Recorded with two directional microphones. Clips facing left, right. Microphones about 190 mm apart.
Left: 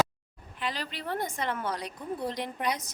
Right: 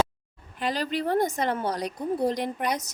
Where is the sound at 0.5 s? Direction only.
40° right (ahead or behind).